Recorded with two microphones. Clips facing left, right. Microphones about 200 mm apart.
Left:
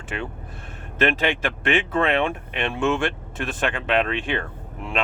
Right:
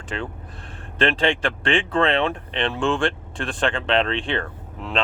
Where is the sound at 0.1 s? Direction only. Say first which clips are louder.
Right 1 dB; 15° left (ahead or behind).